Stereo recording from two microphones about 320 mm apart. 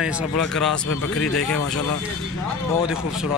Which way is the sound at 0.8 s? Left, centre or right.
Left.